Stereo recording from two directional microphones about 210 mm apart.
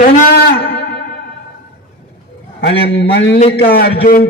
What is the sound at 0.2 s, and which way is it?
Music, 50° left (ahead or behind).